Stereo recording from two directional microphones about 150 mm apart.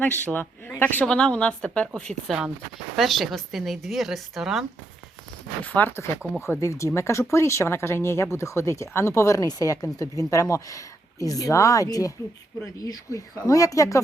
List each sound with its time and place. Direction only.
0.0 s a woman's voice: 10° left (ahead or behind)
5.6 s a woman's voice: 10° left (ahead or behind)